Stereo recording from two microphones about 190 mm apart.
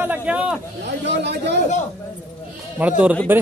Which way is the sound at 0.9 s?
65° right (ahead or behind).